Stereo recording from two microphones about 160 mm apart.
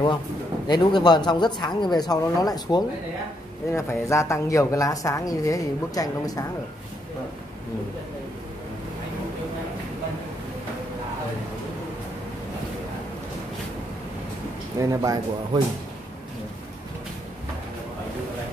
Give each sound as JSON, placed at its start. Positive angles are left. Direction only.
{"t": 0.7, "sound": "a woman's voice", "side_deg": 30}
{"t": 14.8, "sound": "speech", "side_deg": -20}